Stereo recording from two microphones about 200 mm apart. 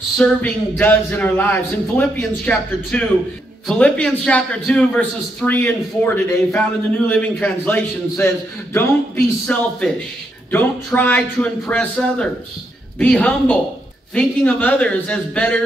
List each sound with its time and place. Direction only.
0.2 s a man's voice: 10° left (ahead or behind)